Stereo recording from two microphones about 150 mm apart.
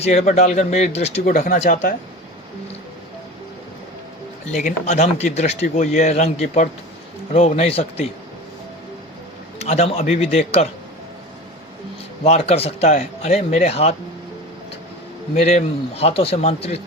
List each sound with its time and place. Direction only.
0.0 s speech: 45° left (ahead or behind)
1.2 s speech: 60° left (ahead or behind)
4.5 s speech: 50° left (ahead or behind)
9.6 s speech: 45° left (ahead or behind)
12.2 s speech: 45° left (ahead or behind)
15.4 s speech: 45° left (ahead or behind)